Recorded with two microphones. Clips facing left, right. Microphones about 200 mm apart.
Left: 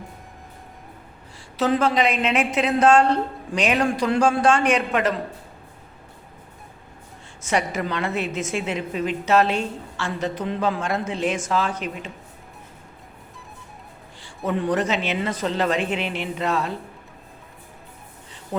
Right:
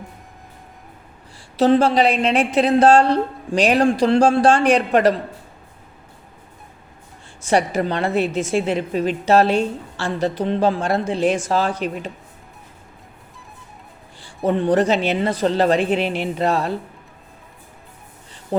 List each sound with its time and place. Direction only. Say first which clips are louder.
1.5 s a woman's voice: right 5 dB; 30° right (ahead or behind)
7.4 s a woman's voice: right 5 dB; 35° right (ahead or behind)
14.4 s a woman's voice: right 6 dB; 30° right (ahead or behind)